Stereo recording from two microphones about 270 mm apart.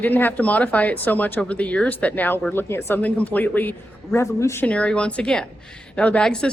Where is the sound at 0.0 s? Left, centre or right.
Centre.